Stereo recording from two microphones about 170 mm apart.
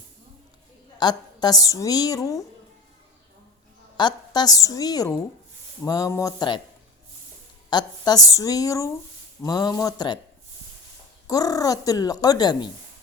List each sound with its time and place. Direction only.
0.9 s a woman's voice: 25° left (ahead or behind)
3.9 s a woman's voice: 25° left (ahead or behind)
7.7 s a woman's voice: 25° left (ahead or behind)
11.3 s a woman's voice: 20° left (ahead or behind)